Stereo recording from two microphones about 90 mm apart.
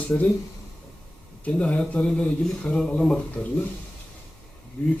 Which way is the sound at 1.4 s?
15° left (ahead or behind).